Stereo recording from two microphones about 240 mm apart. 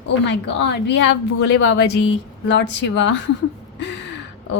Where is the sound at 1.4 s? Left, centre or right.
Left.